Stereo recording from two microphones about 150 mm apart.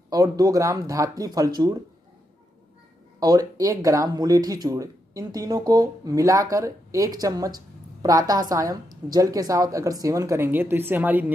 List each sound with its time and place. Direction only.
0.1 s a woman's voice: 25° right (ahead or behind)
3.2 s a woman's voice: 25° right (ahead or behind)